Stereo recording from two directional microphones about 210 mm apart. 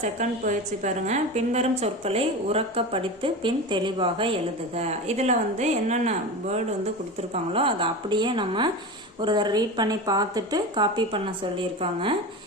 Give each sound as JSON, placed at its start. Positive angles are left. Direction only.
{"t": 0.0, "sound": "a woman's voice", "side_deg": -35}